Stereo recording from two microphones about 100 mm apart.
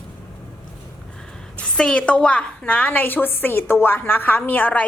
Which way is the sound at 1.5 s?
10° left (ahead or behind).